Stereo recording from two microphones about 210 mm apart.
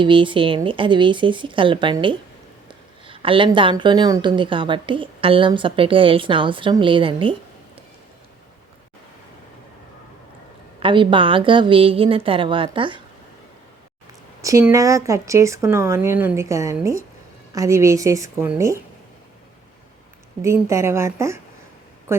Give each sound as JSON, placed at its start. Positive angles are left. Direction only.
{"t": 0.0, "sound": "a woman's voice", "side_deg": -25}
{"t": 10.8, "sound": "a woman's voice", "side_deg": -25}
{"t": 14.4, "sound": "speech", "side_deg": -15}
{"t": 20.4, "sound": "speech", "side_deg": -15}